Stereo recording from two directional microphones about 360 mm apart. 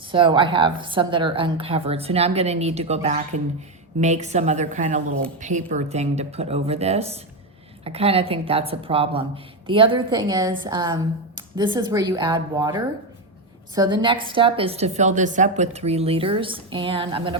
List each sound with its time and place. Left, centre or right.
0.1 s a woman's voice: centre